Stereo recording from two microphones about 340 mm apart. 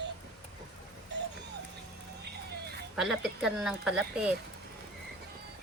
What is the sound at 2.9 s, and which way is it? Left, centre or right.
Speech, centre.